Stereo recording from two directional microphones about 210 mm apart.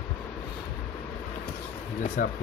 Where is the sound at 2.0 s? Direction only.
40° left (ahead or behind).